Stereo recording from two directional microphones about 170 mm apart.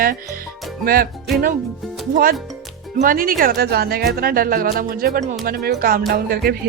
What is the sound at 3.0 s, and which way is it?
Speech, 55° right (ahead or behind).